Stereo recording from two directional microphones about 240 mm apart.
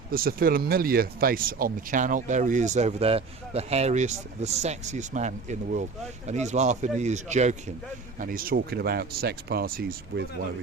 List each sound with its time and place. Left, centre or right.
0.1 s speech: right